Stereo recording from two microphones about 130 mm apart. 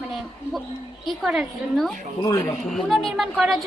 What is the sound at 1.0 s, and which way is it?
A woman's voice, 5° right (ahead or behind).